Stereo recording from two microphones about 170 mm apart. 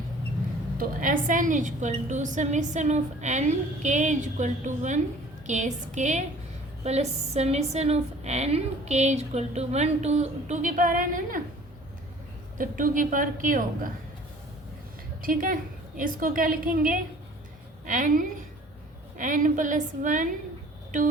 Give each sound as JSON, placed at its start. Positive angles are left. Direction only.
{"t": 0.8, "sound": "a woman's voice", "side_deg": -50}
{"t": 12.5, "sound": "a woman's voice", "side_deg": -55}
{"t": 15.2, "sound": "a woman's voice", "side_deg": -55}